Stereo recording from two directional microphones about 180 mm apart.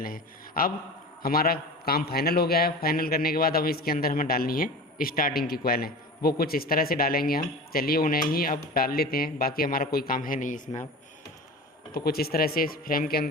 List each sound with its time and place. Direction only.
0.0 s a man's voice: 50° left (ahead or behind)
11.9 s a man's voice: 60° left (ahead or behind)